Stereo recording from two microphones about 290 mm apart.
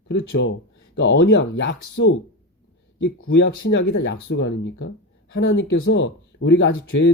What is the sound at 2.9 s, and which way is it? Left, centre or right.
Speech, left.